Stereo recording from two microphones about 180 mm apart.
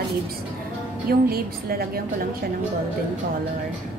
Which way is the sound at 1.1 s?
55° right (ahead or behind).